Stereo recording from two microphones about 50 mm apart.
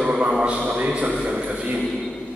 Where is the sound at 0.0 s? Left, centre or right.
Right.